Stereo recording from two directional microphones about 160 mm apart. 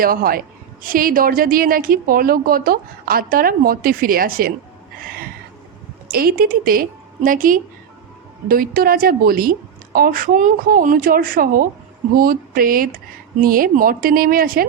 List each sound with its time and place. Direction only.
0.0 s a woman's voice: 65° right (ahead or behind)
6.1 s a woman's voice: 70° right (ahead or behind)